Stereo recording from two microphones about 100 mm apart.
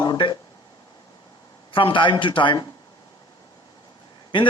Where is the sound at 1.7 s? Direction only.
55° left (ahead or behind).